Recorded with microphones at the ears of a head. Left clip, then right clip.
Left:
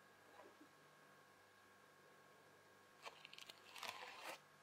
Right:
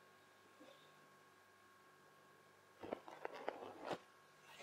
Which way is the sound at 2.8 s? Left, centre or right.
Right.